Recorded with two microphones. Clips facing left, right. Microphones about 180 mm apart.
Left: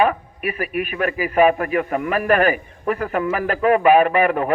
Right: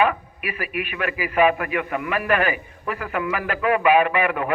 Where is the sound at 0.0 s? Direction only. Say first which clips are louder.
Left 3 dB; 40° left (ahead or behind).